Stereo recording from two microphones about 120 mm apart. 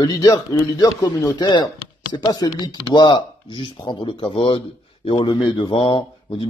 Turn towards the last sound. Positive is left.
turn(degrees=45)  # may be behind; listen again after turning